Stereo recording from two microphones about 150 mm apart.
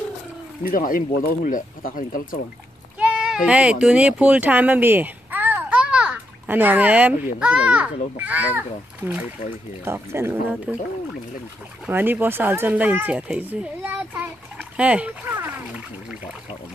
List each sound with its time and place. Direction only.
0.7 s speech: 70° left (ahead or behind)
3.0 s sheep: 5° right (ahead or behind)
3.8 s a child's voice: 10° right (ahead or behind)
11.8 s speech: 10° right (ahead or behind)